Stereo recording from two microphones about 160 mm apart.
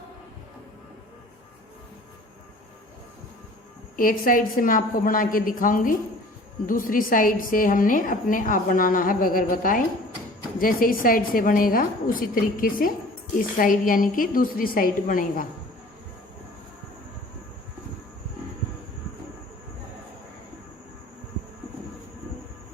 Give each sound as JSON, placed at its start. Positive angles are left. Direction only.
{"t": 3.9, "sound": "a woman's voice", "side_deg": 60}